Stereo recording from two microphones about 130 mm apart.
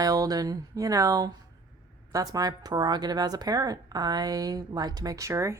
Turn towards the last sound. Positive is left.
turn(degrees=-20)  # may be behind; listen again after turning